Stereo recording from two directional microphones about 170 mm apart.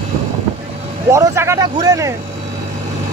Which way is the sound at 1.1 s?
15° right (ahead or behind).